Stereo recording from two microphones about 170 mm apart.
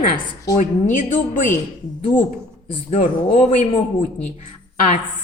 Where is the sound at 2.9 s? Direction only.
50° left (ahead or behind).